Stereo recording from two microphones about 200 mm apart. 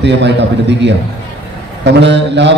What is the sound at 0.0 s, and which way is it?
A man's voice, 60° right (ahead or behind).